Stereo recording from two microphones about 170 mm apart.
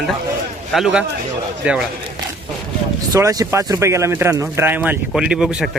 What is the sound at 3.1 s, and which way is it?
Speech, 20° right (ahead or behind).